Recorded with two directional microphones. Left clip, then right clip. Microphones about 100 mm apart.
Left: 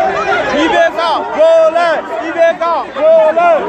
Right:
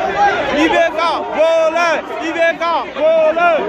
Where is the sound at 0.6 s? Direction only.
40° right (ahead or behind).